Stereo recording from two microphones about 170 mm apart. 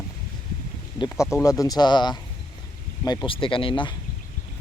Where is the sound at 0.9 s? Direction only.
20° left (ahead or behind).